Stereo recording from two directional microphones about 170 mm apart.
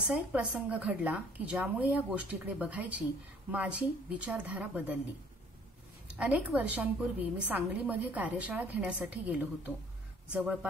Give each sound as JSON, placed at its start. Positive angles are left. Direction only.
{"t": 0.0, "sound": "speech", "side_deg": -5}
{"t": 6.1, "sound": "speech", "side_deg": -10}